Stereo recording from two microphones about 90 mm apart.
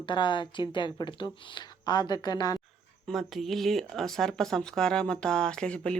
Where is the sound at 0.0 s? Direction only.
60° left (ahead or behind).